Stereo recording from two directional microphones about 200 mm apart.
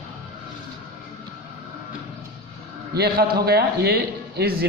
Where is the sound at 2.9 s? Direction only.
50° right (ahead or behind).